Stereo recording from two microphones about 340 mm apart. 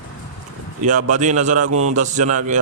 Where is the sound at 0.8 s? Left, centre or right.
Right.